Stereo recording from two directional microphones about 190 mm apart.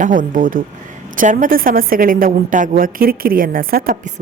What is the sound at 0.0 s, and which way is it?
A woman's voice, 45° right (ahead or behind).